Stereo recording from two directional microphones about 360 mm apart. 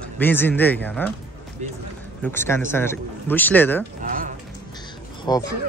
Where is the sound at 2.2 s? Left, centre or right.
Centre.